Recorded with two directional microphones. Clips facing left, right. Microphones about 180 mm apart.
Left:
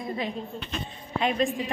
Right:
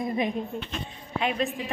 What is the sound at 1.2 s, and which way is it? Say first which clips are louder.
Speech: left 2 dB; 5° right (ahead or behind).